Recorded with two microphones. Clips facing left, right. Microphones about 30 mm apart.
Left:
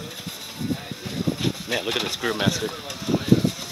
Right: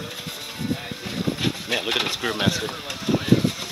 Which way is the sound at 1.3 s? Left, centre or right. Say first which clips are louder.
Right 1 dB; centre.